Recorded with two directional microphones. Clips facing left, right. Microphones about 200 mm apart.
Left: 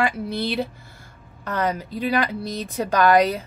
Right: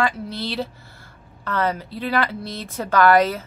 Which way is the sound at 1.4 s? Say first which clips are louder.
Right 1 dB; 15° left (ahead or behind).